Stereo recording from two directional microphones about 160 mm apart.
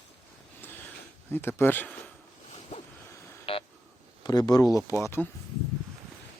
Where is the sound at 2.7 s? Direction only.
40° left (ahead or behind).